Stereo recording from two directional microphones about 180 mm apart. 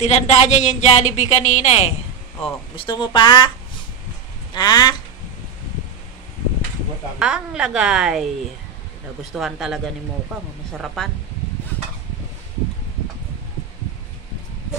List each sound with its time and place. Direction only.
0.0 s a woman's voice: 40° left (ahead or behind)
2.7 s speech: 30° left (ahead or behind)
4.6 s speech: 25° left (ahead or behind)
7.2 s a woman's voice: 5° right (ahead or behind)
9.3 s a woman's voice: centre (ahead or behind)
11.0 s a woman's voice: 5° left (ahead or behind)